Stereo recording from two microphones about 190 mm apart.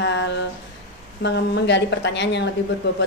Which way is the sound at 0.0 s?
65° left (ahead or behind).